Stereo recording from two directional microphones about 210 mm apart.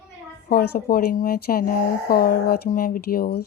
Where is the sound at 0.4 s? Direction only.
45° left (ahead or behind).